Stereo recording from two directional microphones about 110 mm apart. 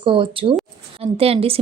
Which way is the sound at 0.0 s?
50° right (ahead or behind).